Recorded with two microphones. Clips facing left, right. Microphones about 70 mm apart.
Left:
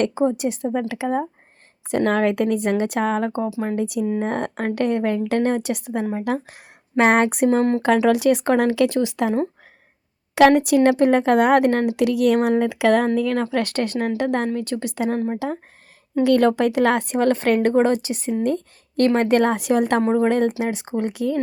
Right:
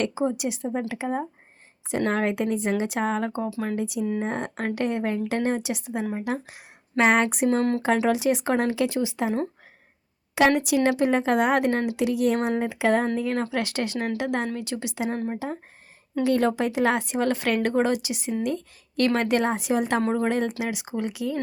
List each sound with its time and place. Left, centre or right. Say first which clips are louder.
0.0 s speech: left 5 dB; left
0.6 s speech: left 5 dB; left
0.9 s speech: left 5 dB; left
1.9 s speech: left 5 dB; left
3.8 s speech: left 5 dB; left
10.3 s speech: left 6 dB; left
12.0 s speech: left 6 dB; left
13.1 s speech: left 5 dB; left
13.4 s speech: left 5 dB; left
16.2 s speech: left 6 dB; left
20.0 s speech: left 5 dB; left
20.2 s speech: left 6 dB; left